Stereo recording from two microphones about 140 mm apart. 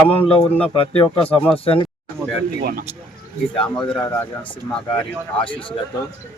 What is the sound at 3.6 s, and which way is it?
Speech, 5° left (ahead or behind).